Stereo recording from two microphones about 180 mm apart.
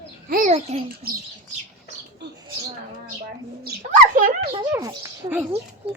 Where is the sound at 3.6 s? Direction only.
50° right (ahead or behind).